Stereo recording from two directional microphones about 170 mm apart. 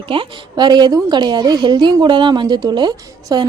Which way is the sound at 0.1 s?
25° right (ahead or behind).